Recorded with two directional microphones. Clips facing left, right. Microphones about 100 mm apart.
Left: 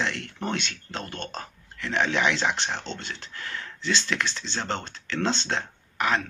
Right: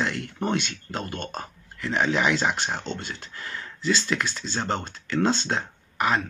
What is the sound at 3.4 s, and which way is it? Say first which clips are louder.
Speech: right 4 dB; 5° right (ahead or behind).